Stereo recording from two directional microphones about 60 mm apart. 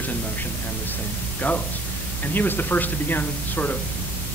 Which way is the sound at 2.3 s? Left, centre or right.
Left.